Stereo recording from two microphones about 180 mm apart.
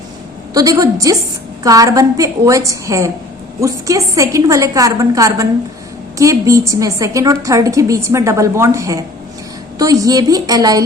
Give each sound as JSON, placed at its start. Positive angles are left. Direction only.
{"t": 0.5, "sound": "a woman's voice", "side_deg": -20}